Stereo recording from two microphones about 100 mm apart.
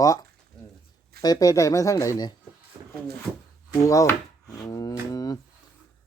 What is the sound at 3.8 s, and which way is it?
Speech, 35° left (ahead or behind).